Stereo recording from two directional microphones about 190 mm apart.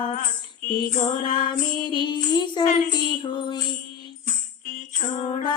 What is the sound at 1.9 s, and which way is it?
Child singing, 25° left (ahead or behind).